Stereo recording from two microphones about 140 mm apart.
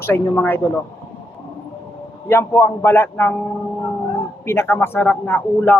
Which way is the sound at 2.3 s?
15° left (ahead or behind).